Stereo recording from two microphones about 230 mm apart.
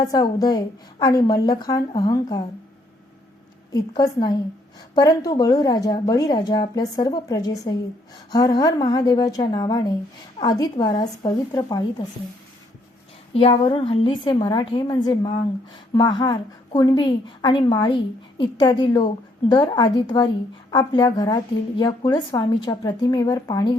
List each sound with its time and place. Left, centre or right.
0.0 s speech: centre
3.7 s speech: centre
13.3 s a woman's voice: left